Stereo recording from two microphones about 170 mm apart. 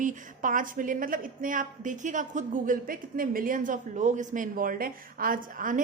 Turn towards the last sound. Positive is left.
turn(degrees=-55)  # may be behind; listen again after turning